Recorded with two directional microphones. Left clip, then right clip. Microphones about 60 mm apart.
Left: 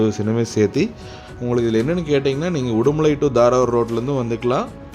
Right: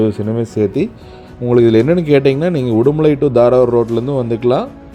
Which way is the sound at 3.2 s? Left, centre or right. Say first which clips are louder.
Right 5 dB; right.